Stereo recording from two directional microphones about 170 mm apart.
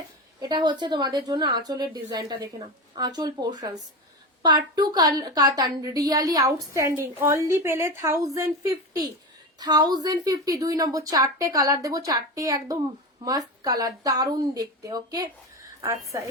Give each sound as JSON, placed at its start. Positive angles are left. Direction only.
{"t": 0.3, "sound": "a woman's voice", "side_deg": -25}